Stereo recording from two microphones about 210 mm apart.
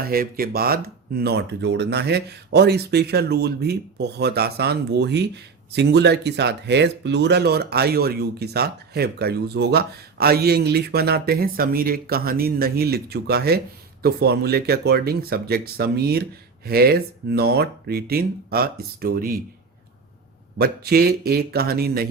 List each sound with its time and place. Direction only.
0.0 s speech: 45° right (ahead or behind)
20.6 s speech: 45° right (ahead or behind)